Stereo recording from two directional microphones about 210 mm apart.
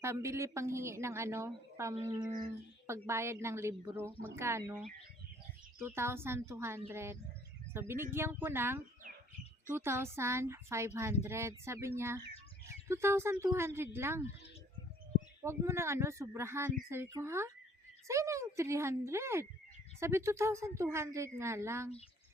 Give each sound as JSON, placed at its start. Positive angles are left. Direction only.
{"t": 0.0, "sound": "speech", "side_deg": -15}
{"t": 5.8, "sound": "speech", "side_deg": -10}
{"t": 15.4, "sound": "speech", "side_deg": -10}